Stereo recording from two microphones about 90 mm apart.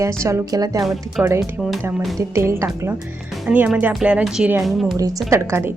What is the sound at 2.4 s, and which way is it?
Speech, 30° right (ahead or behind).